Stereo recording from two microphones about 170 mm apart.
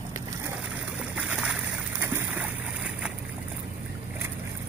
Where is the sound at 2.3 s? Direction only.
5° right (ahead or behind).